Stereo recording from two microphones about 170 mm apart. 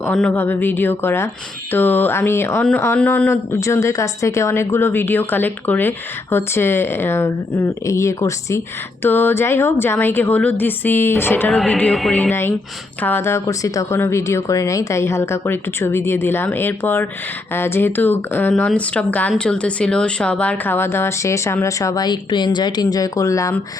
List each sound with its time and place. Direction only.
0.0 s speech: 5° left (ahead or behind)
11.4 s speech: centre (ahead or behind)
12.3 s speech: 15° left (ahead or behind)